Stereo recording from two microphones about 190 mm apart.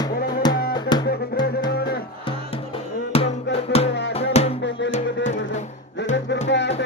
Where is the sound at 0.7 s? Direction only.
20° left (ahead or behind).